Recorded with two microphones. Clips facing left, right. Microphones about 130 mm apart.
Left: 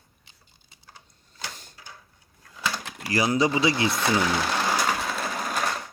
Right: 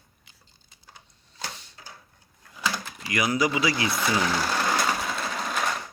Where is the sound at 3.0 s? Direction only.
30° left (ahead or behind).